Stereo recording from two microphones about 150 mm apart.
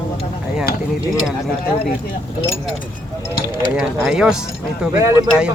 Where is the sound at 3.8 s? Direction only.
5° right (ahead or behind).